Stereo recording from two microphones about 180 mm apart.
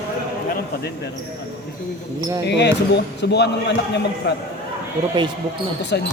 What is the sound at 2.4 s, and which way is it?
Speech, 70° left (ahead or behind).